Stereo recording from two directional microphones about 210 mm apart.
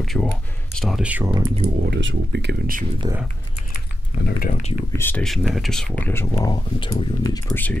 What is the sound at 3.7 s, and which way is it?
Typing, 45° left (ahead or behind).